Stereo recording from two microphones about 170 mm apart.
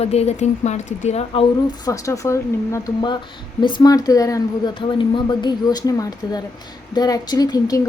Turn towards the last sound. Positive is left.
turn(degrees=20)  # may be behind; listen again after turning